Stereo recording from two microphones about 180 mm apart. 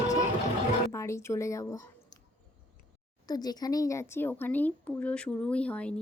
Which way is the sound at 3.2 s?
20° left (ahead or behind).